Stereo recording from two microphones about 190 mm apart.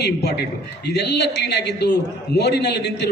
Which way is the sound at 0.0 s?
60° left (ahead or behind).